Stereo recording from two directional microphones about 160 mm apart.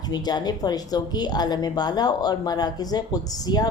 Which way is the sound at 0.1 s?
25° left (ahead or behind).